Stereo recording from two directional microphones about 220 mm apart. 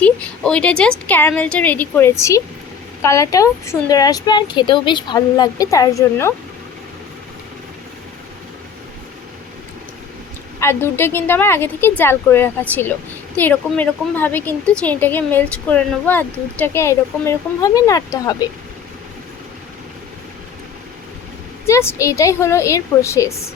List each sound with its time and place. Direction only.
0.0 s a woman's voice: 5° left (ahead or behind)
10.6 s speech: 10° left (ahead or behind)
21.7 s speech: 10° left (ahead or behind)